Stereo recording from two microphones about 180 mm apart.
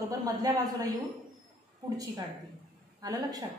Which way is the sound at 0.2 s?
20° right (ahead or behind).